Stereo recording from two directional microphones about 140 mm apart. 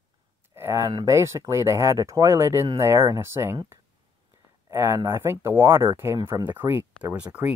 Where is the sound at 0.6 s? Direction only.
20° right (ahead or behind).